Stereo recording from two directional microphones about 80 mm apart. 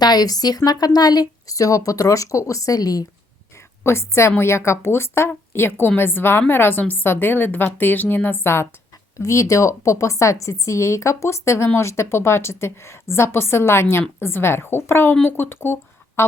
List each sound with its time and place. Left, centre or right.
0.0 s speech: left
3.8 s a woman's voice: left
9.1 s a woman's voice: left